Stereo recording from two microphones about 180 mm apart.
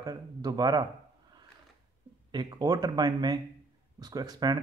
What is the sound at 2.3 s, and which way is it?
Speech, 25° right (ahead or behind).